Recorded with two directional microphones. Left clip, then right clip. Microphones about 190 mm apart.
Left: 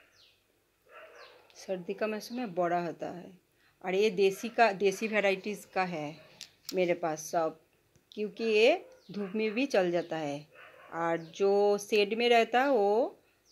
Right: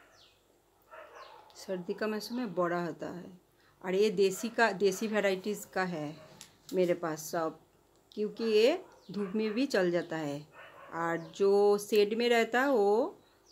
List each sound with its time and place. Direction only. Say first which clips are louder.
1.5 s a woman's voice: left 1 dB; centre (ahead or behind)
6.3 s a sound: even; 50° left (ahead or behind)
6.8 s a woman's voice: left 1 dB; centre (ahead or behind)